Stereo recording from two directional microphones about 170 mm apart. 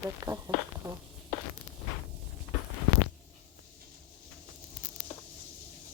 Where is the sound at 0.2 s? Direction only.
20° right (ahead or behind).